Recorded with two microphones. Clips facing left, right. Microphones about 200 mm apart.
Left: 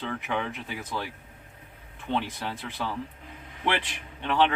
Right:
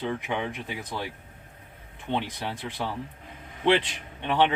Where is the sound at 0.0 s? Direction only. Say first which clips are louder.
Right 2 dB; 20° right (ahead or behind).